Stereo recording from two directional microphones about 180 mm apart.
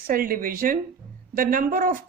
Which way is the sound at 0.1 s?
50° right (ahead or behind).